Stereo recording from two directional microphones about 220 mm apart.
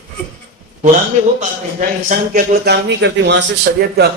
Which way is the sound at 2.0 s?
40° right (ahead or behind).